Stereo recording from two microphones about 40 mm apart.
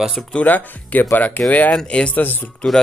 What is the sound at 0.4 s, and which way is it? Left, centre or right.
Speech, left.